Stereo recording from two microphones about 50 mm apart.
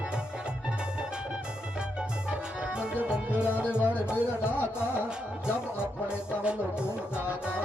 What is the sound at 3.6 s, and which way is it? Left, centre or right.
Music, left.